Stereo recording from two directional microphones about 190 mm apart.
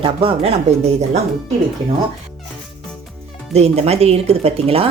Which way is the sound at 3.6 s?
35° right (ahead or behind).